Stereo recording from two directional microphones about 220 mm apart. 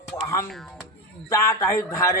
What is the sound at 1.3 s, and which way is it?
Speech, 15° left (ahead or behind).